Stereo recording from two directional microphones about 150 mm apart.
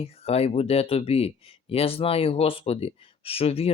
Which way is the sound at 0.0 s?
40° left (ahead or behind).